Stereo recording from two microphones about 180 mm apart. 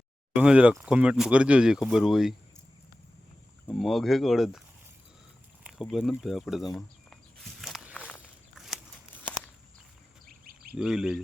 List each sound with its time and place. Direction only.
0.3 s speech: 5° right (ahead or behind)
3.7 s speech: centre (ahead or behind)
5.6 s speech: centre (ahead or behind)
7.6 s walk: centre (ahead or behind)
8.5 s a sound: centre (ahead or behind)
9.1 s walk: 10° left (ahead or behind)
10.2 s bird: 55° right (ahead or behind)
10.8 s speech: 5° right (ahead or behind)